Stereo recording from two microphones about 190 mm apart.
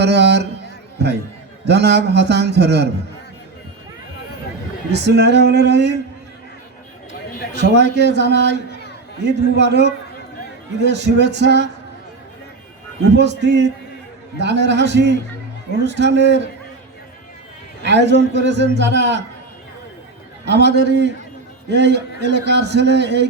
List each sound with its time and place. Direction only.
0.0 s a man's voice: 65° right (ahead or behind)
1.6 s a man's voice: 60° right (ahead or behind)
4.9 s a man's voice: 60° right (ahead or behind)
7.1 s a sound: 50° left (ahead or behind)
7.6 s a man's voice: 65° right (ahead or behind)
13.1 s a man's voice: 65° right (ahead or behind)
17.8 s a man's voice: 65° right (ahead or behind)
20.4 s a man's voice: 60° right (ahead or behind)